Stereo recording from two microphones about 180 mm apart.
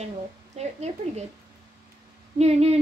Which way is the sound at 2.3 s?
35° right (ahead or behind).